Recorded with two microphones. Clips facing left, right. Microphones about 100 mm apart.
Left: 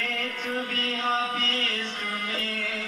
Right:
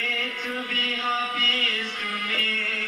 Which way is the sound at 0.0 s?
40° left (ahead or behind).